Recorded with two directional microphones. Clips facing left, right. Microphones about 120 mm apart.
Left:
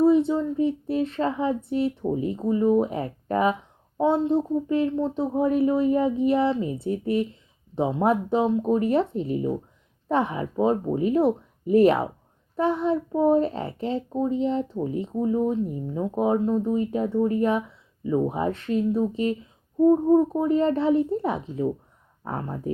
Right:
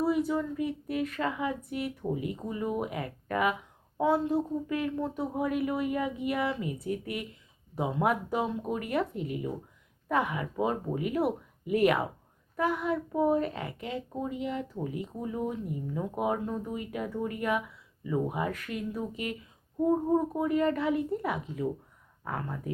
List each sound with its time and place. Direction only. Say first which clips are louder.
0.0 s a child's voice: left 8 dB; 25° left (ahead or behind)